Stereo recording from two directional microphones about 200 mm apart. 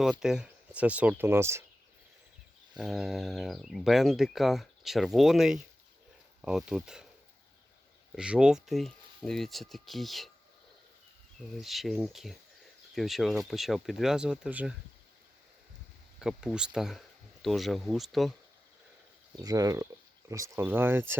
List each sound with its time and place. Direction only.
0.0 s speech: centre (ahead or behind)
2.7 s speech: 5° right (ahead or behind)
8.1 s speech: 5° right (ahead or behind)
11.6 s speech: centre (ahead or behind)
16.2 s speech: 5° right (ahead or behind)
19.4 s speech: 20° right (ahead or behind)